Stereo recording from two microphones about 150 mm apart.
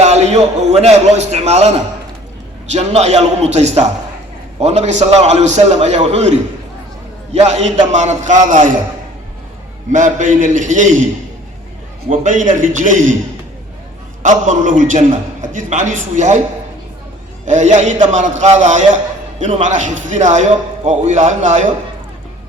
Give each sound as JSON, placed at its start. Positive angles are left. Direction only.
{"t": 0.0, "sound": "a man's voice", "side_deg": -50}
{"t": 7.3, "sound": "a man's voice", "side_deg": -50}
{"t": 9.9, "sound": "a man's voice", "side_deg": -60}
{"t": 12.0, "sound": "a man's voice", "side_deg": -55}
{"t": 14.2, "sound": "a man's voice", "side_deg": -60}
{"t": 17.4, "sound": "a man's voice", "side_deg": -50}